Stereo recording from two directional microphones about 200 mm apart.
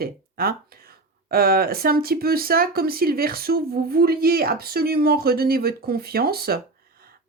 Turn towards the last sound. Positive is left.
turn(degrees=-50)  # may be behind; listen again after turning